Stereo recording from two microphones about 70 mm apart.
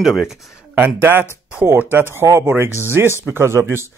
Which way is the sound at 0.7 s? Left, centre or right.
Right.